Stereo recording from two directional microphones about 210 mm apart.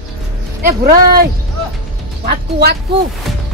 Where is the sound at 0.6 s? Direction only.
45° right (ahead or behind).